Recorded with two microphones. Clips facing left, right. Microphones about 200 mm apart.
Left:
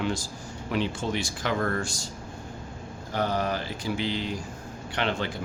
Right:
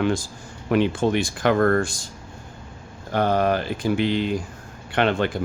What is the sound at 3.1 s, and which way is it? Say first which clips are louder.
Speech: right 7 dB; 55° right (ahead or behind).